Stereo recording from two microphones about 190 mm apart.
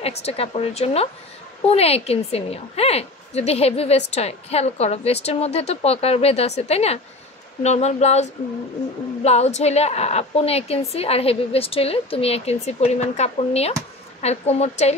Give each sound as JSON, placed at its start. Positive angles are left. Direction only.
{"t": 0.0, "sound": "a woman's voice", "side_deg": 30}